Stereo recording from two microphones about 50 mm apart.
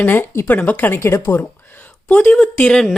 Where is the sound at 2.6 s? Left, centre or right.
Centre.